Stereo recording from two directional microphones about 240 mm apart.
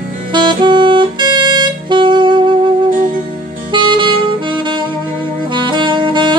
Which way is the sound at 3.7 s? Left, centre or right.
Centre.